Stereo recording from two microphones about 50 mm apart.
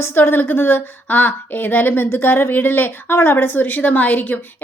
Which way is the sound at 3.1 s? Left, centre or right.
Left.